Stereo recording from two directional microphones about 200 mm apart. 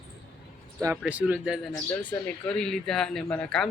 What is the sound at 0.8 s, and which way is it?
Speech, 5° right (ahead or behind).